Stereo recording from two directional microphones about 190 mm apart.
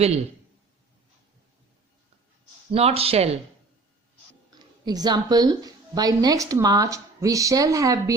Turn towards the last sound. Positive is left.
turn(degrees=-20)  # may be behind; listen again after turning